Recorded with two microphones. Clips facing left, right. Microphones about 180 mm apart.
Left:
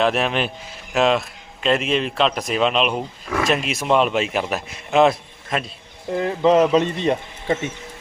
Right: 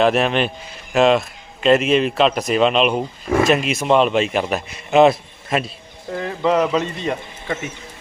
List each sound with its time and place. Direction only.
0.0 s a man's voice: centre (ahead or behind)
6.1 s speech: 20° left (ahead or behind)